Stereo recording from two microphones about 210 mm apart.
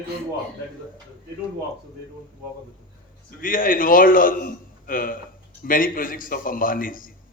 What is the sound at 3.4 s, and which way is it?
A man's voice, 40° left (ahead or behind).